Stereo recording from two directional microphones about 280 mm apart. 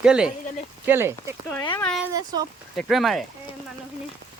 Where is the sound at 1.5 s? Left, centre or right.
Centre.